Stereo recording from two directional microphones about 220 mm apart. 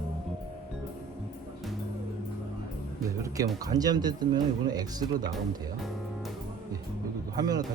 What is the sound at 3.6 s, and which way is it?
Speech, 15° right (ahead or behind).